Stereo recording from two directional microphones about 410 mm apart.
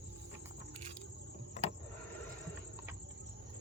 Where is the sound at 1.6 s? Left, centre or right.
Centre.